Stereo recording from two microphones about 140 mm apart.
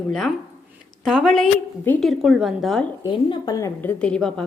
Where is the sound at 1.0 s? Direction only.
Centre (ahead or behind).